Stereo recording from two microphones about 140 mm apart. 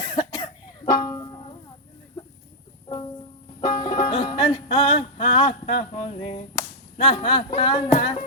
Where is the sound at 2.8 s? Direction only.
35° left (ahead or behind).